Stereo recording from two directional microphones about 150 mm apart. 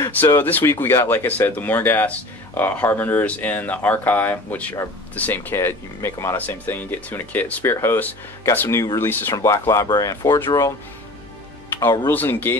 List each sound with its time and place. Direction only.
0.1 s speech: 15° left (ahead or behind)
12.1 s speech: 10° left (ahead or behind)